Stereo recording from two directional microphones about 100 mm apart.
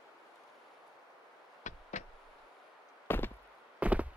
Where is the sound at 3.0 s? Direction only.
20° left (ahead or behind).